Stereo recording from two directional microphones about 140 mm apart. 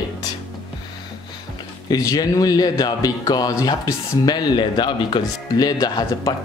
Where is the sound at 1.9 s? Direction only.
25° left (ahead or behind).